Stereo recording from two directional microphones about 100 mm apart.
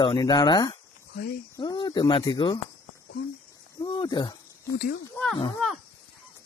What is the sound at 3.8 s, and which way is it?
Speech, 45° left (ahead or behind).